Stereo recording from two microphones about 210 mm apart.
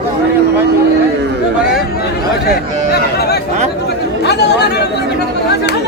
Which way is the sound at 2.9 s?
50° left (ahead or behind).